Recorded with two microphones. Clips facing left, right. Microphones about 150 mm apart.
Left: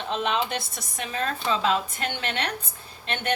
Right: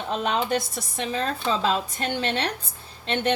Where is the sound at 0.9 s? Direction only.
30° right (ahead or behind).